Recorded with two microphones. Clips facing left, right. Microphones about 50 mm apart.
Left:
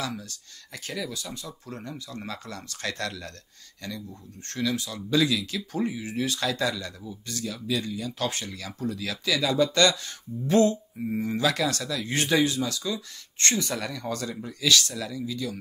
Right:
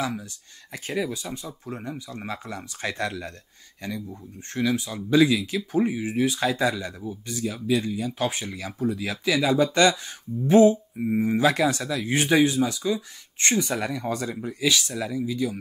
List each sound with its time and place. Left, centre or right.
0.0 s speech: centre